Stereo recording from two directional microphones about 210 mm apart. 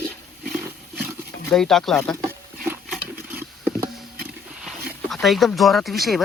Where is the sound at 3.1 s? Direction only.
10° right (ahead or behind).